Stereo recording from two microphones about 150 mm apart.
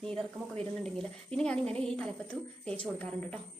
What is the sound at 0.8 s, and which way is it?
A woman's voice, 5° left (ahead or behind).